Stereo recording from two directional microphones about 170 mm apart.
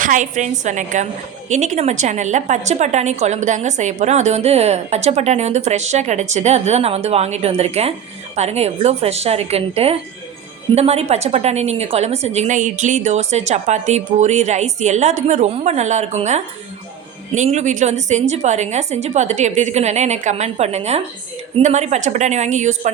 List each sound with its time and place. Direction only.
0.0 s a woman's voice: 50° right (ahead or behind)